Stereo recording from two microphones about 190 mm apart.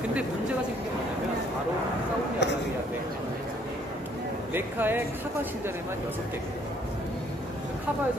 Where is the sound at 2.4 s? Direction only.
65° left (ahead or behind).